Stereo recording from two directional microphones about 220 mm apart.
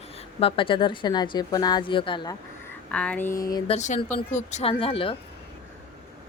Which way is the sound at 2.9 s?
5° left (ahead or behind).